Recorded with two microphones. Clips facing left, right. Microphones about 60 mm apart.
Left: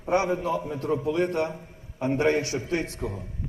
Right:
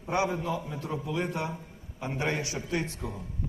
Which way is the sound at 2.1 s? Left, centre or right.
Left.